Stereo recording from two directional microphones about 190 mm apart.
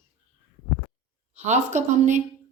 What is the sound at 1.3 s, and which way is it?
Speech, 35° right (ahead or behind).